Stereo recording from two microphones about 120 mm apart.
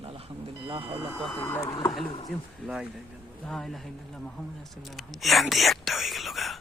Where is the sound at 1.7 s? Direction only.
40° left (ahead or behind).